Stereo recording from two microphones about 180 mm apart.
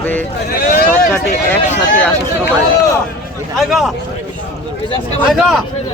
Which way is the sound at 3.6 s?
Centre (ahead or behind).